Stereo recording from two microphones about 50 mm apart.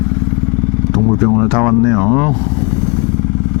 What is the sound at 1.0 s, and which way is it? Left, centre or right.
Speech, left.